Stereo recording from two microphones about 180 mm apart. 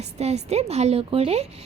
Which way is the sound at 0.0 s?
35° right (ahead or behind).